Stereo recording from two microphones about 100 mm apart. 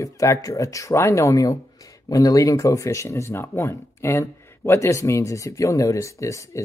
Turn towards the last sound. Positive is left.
turn(degrees=30)  # may be behind; listen again after turning